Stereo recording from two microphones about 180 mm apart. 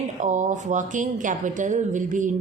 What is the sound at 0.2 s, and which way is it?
Speech, 45° right (ahead or behind).